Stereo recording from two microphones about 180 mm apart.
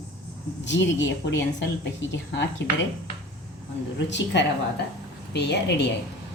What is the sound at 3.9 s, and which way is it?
Speech, 75° left (ahead or behind).